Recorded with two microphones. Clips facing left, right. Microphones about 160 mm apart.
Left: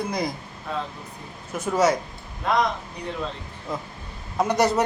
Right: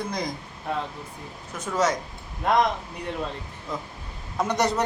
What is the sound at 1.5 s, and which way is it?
Speech, 10° left (ahead or behind).